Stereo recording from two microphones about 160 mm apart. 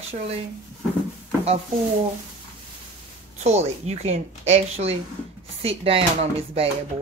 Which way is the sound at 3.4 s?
45° right (ahead or behind).